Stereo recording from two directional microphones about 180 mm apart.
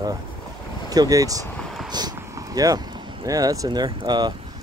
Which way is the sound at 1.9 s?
20° right (ahead or behind).